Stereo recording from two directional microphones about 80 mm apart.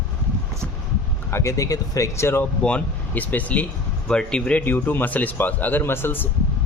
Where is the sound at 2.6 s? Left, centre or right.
Centre.